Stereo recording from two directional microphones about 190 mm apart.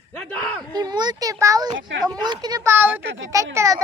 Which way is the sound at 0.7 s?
20° right (ahead or behind).